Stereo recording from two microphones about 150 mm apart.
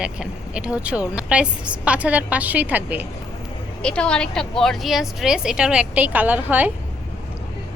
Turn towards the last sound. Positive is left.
turn(degrees=-10)  # may be behind; listen again after turning